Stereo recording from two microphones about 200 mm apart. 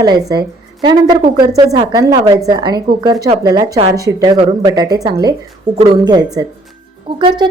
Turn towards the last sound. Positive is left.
turn(degrees=-25)  # may be behind; listen again after turning